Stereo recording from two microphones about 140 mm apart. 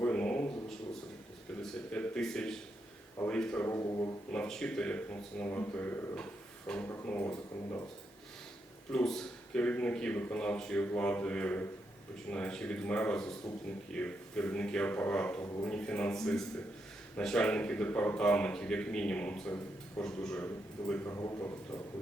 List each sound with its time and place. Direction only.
0.0 s a sound: 10° left (ahead or behind)
3.2 s speech: 5° left (ahead or behind); by 4.1 s 25° left (ahead or behind)
4.3 s speech: 5° left (ahead or behind)
8.9 s speech: 5° left (ahead or behind)
21.1 s speech: 20° left (ahead or behind)